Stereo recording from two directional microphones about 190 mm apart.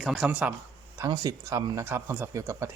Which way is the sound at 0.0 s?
Centre (ahead or behind).